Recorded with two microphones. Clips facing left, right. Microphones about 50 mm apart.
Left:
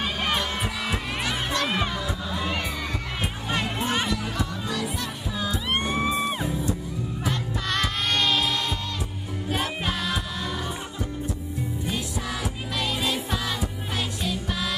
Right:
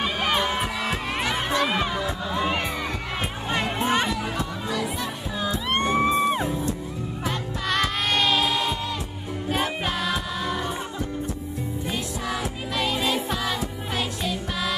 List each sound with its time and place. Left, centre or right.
0.0 s heart sounds: centre
0.5 s music: centre
3.4 s music: centre
5.7 s music: centre
6.3 s music: centre
11.9 s music: centre